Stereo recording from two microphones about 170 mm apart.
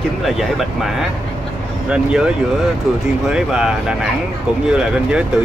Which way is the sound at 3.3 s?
5° right (ahead or behind).